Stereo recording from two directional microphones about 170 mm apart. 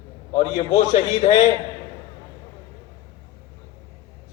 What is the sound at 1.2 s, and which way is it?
Speech, 40° left (ahead or behind).